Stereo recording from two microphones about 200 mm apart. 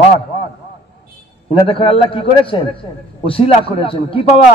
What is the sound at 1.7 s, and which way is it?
A man's voice, 25° left (ahead or behind).